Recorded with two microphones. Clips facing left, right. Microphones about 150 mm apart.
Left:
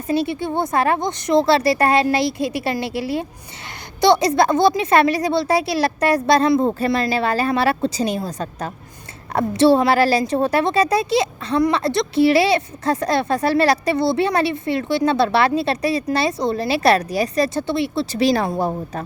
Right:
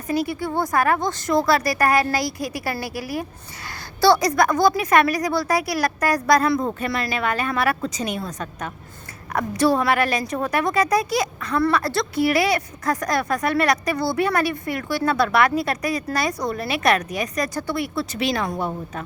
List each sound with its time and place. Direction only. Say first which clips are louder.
0.1 s a woman's voice: left 3 dB; 25° left (ahead or behind)